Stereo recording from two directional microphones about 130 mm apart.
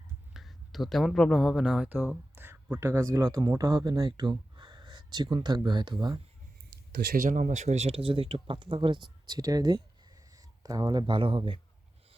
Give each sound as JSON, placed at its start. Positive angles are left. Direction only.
{"t": 0.3, "sound": "speech", "side_deg": 0}
{"t": 7.2, "sound": "speech", "side_deg": -80}